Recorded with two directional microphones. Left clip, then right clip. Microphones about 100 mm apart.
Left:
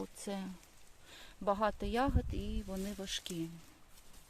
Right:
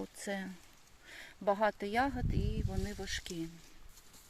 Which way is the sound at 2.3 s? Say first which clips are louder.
Right 2 dB; 40° left (ahead or behind).